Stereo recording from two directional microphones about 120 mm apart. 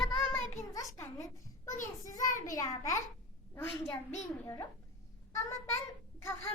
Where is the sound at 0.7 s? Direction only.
25° left (ahead or behind).